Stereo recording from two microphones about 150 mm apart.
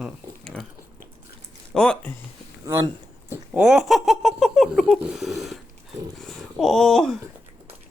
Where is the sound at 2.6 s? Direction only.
20° right (ahead or behind).